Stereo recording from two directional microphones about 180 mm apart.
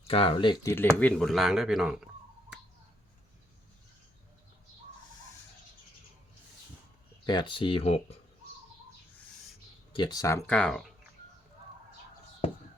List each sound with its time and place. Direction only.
0.1 s speech: 30° left (ahead or behind)
0.9 s speech: 5° left (ahead or behind)
7.3 s speech: 25° left (ahead or behind)
9.9 s speech: 25° left (ahead or behind); by 10.9 s centre (ahead or behind)